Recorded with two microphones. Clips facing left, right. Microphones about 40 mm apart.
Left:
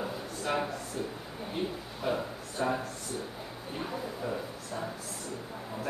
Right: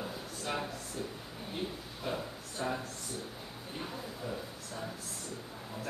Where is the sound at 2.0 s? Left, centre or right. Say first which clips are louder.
Left 6 dB; centre.